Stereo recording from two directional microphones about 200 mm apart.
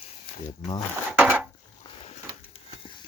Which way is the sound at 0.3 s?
45° left (ahead or behind).